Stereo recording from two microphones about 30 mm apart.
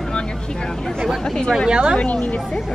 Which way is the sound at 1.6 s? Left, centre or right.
Right.